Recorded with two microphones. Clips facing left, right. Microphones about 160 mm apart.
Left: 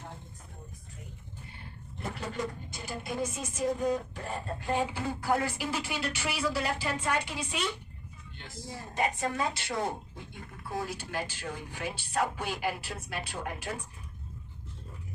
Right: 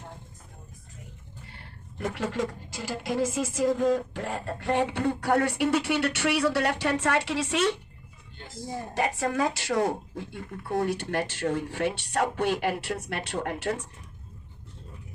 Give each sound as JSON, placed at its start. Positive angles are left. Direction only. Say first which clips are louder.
{"t": 1.5, "sound": "a woman's voice", "louder": "right 8 dB", "side_deg": -90}
{"t": 9.0, "sound": "a woman's voice", "louder": "right 4 dB", "side_deg": -80}
{"t": 10.7, "sound": "speech", "louder": "right 8 dB", "side_deg": -65}